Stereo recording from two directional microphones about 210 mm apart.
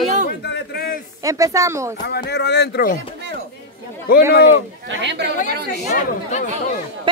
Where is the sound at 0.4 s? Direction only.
55° left (ahead or behind).